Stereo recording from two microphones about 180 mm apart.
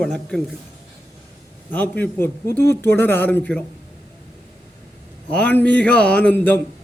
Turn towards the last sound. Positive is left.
turn(degrees=10)  # may be behind; listen again after turning